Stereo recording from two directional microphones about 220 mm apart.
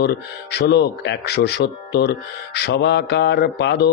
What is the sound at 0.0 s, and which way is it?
Speech, 50° left (ahead or behind).